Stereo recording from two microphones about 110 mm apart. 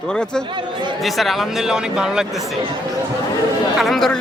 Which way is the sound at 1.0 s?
Centre (ahead or behind).